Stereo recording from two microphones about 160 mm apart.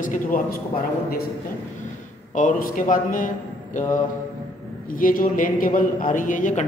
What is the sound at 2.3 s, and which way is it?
A man's voice, 55° left (ahead or behind).